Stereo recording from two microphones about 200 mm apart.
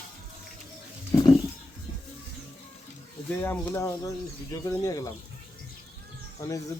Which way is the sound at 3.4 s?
10° left (ahead or behind).